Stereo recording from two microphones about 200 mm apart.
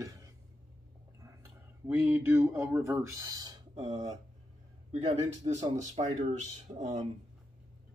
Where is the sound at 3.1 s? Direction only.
20° right (ahead or behind).